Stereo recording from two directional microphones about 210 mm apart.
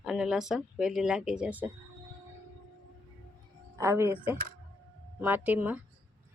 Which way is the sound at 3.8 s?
15° right (ahead or behind).